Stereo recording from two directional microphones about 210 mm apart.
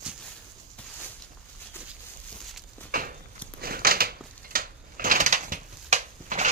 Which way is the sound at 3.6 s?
45° right (ahead or behind).